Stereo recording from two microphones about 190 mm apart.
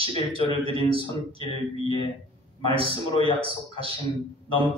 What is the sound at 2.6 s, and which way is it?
Speech, 30° right (ahead or behind).